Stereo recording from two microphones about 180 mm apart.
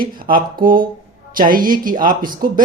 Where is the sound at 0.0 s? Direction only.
55° right (ahead or behind).